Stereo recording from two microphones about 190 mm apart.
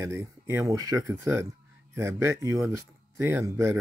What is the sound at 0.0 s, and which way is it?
Speech, 15° right (ahead or behind).